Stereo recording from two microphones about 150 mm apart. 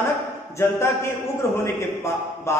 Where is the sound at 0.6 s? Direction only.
15° left (ahead or behind).